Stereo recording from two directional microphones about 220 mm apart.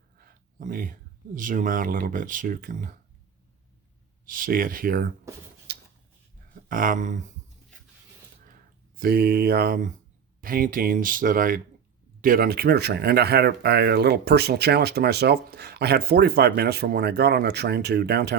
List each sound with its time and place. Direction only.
0.2 s a sound: 40° right (ahead or behind)
1.4 s speech: 35° right (ahead or behind)
4.3 s speech: 40° right (ahead or behind)
5.7 s a sound: 50° right (ahead or behind)
6.7 s speech: 40° right (ahead or behind)
9.0 s speech: 45° right (ahead or behind)